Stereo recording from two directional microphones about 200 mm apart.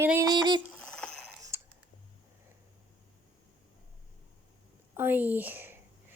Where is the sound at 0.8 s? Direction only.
5° left (ahead or behind).